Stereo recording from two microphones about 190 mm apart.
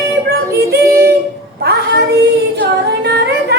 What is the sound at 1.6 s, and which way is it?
Child singing, 60° right (ahead or behind).